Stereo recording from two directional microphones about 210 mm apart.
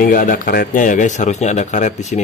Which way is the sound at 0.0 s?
40° left (ahead or behind).